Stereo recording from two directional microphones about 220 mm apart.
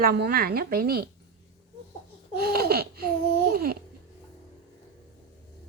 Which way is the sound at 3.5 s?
45° right (ahead or behind).